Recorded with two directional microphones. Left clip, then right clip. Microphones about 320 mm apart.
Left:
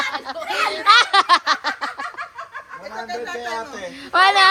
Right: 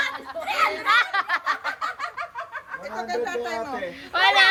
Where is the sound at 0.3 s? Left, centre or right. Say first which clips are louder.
Left 1 dB; centre.